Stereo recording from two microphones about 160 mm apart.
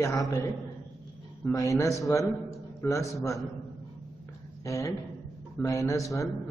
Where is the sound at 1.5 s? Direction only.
20° left (ahead or behind).